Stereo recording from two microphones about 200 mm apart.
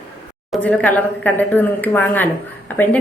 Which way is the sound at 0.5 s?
5° left (ahead or behind).